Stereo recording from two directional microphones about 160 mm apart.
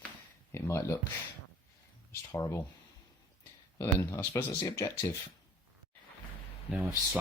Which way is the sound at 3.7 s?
15° left (ahead or behind).